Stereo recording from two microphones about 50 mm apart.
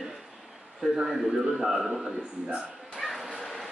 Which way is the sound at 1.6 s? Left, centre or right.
Centre.